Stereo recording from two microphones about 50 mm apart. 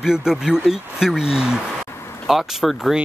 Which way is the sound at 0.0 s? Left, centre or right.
Centre.